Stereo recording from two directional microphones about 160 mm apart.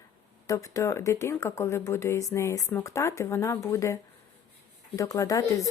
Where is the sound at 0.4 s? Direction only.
20° left (ahead or behind).